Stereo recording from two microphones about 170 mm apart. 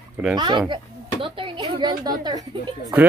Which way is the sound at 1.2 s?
30° right (ahead or behind).